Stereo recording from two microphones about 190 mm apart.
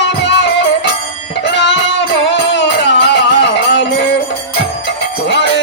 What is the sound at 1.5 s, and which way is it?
Music, 70° left (ahead or behind).